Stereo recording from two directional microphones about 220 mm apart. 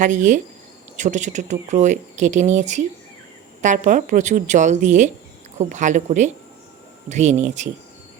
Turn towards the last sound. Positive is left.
turn(degrees=-35)  # may be behind; listen again after turning